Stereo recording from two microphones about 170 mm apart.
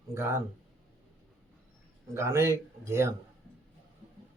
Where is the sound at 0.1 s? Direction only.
15° right (ahead or behind).